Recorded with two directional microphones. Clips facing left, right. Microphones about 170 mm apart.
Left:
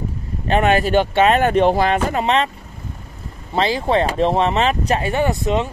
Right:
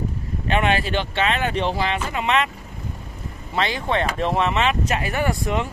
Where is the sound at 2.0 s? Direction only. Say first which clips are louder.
Left 4 dB; 35° left (ahead or behind).